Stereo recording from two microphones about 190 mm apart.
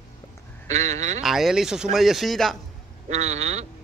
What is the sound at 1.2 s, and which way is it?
Speech, centre (ahead or behind).